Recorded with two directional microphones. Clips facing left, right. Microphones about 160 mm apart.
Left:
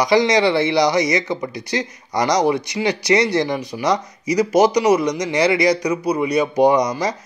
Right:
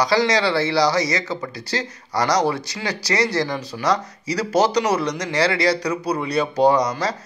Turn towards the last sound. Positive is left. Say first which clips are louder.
# left 2 dB
turn(degrees=15)  # may be behind; listen again after turning